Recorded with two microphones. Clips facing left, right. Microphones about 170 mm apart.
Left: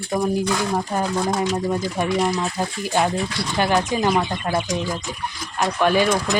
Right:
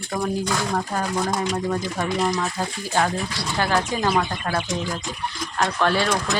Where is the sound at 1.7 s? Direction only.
10° left (ahead or behind).